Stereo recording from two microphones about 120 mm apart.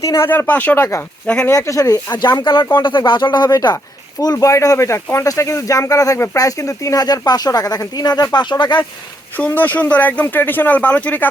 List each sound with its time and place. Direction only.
0.0 s speech: 25° left (ahead or behind)
0.3 s speech: 15° left (ahead or behind)
2.4 s speech: 40° left (ahead or behind)
9.4 s speech: 15° left (ahead or behind)